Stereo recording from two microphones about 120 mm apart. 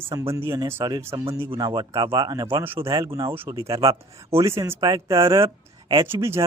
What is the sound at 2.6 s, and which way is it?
A man's voice, 20° right (ahead or behind).